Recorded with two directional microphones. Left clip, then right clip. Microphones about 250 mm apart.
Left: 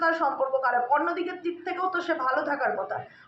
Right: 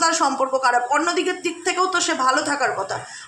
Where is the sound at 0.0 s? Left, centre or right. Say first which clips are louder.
Right 5 dB; right.